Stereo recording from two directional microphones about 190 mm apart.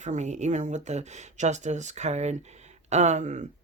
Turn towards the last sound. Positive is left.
turn(degrees=-40)  # may be behind; listen again after turning